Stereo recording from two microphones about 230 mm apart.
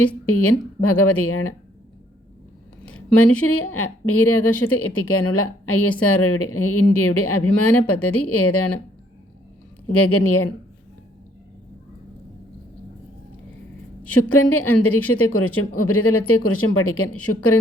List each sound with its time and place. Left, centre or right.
0.3 s a woman's voice: left
3.4 s a woman's voice: left
9.8 s a woman's voice: left
14.1 s a woman's voice: left